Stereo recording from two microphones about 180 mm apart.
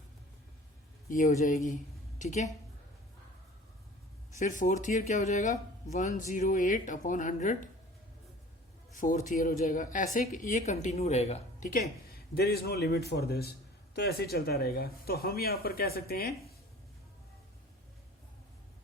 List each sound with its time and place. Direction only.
1.1 s speech: 45° left (ahead or behind)
4.4 s speech: 45° left (ahead or behind)
9.0 s speech: 45° left (ahead or behind)
11.7 s speech: 55° left (ahead or behind)